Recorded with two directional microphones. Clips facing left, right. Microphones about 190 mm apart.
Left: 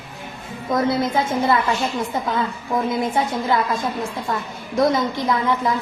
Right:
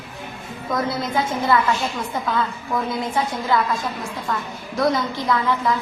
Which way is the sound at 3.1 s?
20° left (ahead or behind).